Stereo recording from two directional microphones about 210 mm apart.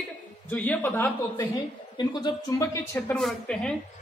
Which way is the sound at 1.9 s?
20° left (ahead or behind).